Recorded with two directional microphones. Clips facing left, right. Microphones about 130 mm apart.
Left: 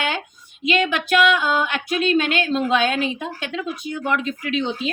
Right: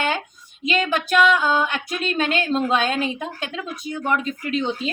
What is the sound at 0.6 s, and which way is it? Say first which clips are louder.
Speech: left 1 dB; 40° right (ahead or behind).